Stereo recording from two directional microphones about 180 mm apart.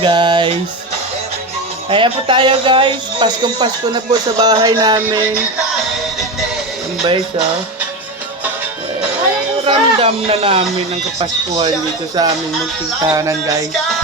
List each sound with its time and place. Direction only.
0.0 s speech: 25° right (ahead or behind)
1.9 s speech: 30° right (ahead or behind)
9.6 s a sound: 35° right (ahead or behind)
11.2 s speech: 30° right (ahead or behind)
13.1 s speech: 20° right (ahead or behind)